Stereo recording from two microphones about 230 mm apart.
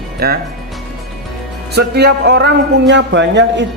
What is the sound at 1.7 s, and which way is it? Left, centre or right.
Speech, right.